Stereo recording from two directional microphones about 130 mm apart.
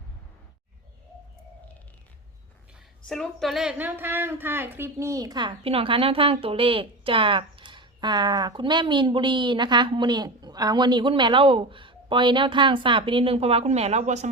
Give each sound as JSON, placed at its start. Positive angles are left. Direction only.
{"t": 3.1, "sound": "speech", "side_deg": 0}